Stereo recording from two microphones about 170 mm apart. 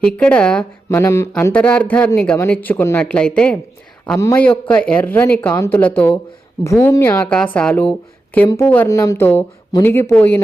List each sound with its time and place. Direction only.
0.0 s a woman's voice: 5° left (ahead or behind)
4.2 s speech: 15° left (ahead or behind)